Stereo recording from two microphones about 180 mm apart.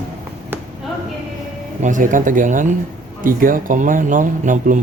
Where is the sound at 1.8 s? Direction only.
45° right (ahead or behind).